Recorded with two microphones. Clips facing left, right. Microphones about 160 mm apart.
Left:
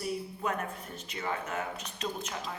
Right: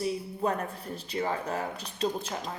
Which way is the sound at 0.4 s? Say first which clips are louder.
Right 6 dB; 35° right (ahead or behind).